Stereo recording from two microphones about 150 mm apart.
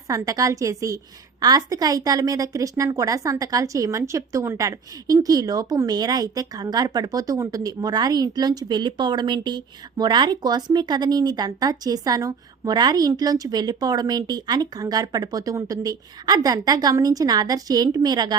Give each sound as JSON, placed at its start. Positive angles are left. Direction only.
{"t": 0.1, "sound": "speech", "side_deg": -20}